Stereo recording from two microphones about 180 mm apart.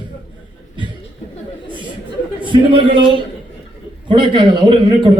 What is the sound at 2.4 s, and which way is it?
A man's voice, 25° right (ahead or behind).